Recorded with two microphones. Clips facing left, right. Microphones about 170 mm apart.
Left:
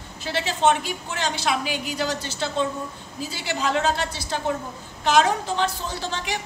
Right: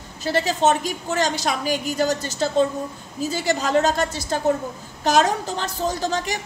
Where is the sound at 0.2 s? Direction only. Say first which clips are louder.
Right 3 dB; 40° right (ahead or behind).